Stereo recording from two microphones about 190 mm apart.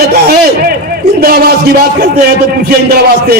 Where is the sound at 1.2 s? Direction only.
55° right (ahead or behind).